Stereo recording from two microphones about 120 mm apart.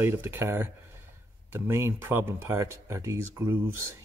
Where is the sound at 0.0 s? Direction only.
20° right (ahead or behind).